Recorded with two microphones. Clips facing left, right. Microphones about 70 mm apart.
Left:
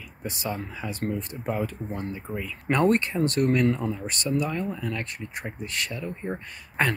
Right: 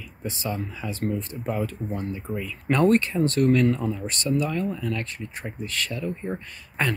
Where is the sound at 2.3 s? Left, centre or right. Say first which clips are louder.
Right 3 dB; centre.